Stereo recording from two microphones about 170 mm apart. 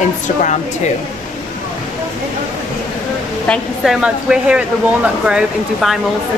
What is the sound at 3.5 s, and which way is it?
A woman's voice, 5° right (ahead or behind).